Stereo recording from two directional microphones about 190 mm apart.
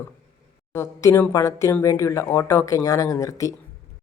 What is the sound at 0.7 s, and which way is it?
Speech, 15° left (ahead or behind).